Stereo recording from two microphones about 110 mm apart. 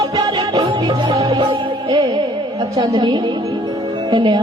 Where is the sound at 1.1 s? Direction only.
60° right (ahead or behind).